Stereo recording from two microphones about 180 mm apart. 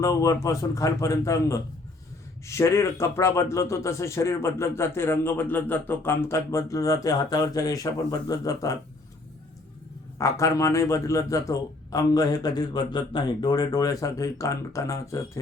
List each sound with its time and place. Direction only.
0.0 s speech: 20° left (ahead or behind)
10.2 s a man's voice: 15° left (ahead or behind)